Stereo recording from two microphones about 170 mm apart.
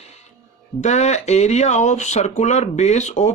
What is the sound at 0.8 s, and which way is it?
Speech, 40° left (ahead or behind).